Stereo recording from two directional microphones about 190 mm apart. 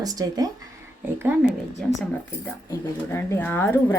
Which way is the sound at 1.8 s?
5° left (ahead or behind).